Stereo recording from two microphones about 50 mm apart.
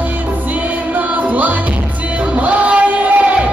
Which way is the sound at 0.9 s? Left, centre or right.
Right.